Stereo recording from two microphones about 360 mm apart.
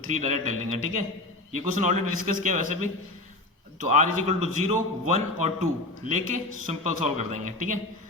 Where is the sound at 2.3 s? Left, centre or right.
Right.